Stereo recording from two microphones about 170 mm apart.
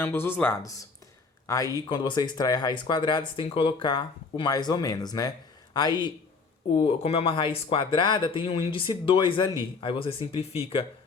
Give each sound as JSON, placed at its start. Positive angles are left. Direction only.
{"t": 0.0, "sound": "speech", "side_deg": 15}